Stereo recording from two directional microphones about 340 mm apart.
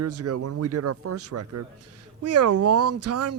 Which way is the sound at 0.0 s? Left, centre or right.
Right.